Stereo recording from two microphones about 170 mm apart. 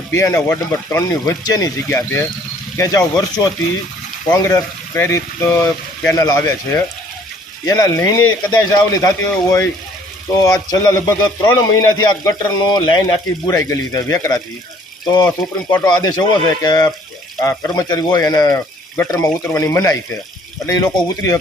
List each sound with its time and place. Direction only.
0.1 s a man's voice: 15° left (ahead or behind)
15.7 s a man's voice: 25° left (ahead or behind)